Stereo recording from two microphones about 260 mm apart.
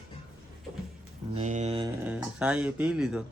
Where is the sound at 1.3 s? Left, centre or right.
Right.